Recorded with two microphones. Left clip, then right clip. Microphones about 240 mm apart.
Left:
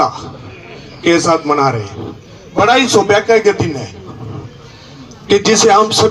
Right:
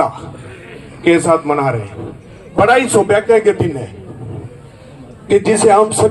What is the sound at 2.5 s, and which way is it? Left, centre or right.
A man's voice, left.